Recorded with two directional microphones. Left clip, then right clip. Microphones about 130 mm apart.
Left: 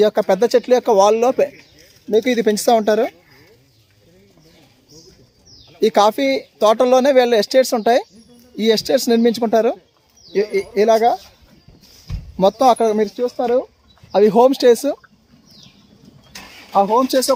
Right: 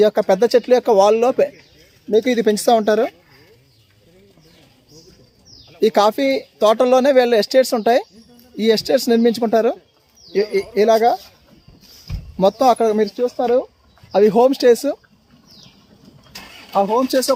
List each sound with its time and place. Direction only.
0.0 s speech: centre (ahead or behind)
5.7 s speech: 5° left (ahead or behind)
12.4 s speech: 10° left (ahead or behind)
14.1 s speech: 20° left (ahead or behind)
16.8 s speech: 10° left (ahead or behind)